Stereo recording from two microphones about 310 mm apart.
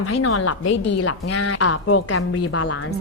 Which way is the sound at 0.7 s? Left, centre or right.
Left.